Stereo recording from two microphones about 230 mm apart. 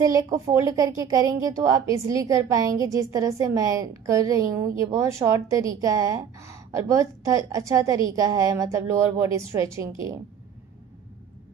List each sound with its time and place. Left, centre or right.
0.0 s speech: centre